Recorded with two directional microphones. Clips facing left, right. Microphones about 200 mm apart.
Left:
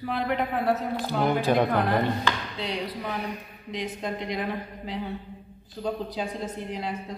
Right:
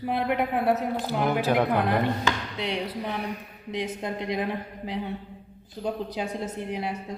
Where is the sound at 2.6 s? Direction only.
25° right (ahead or behind).